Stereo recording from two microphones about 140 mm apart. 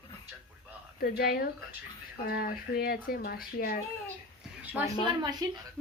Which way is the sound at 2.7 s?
90° left.